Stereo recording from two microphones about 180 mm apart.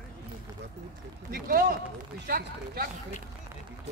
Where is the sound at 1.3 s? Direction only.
50° right (ahead or behind).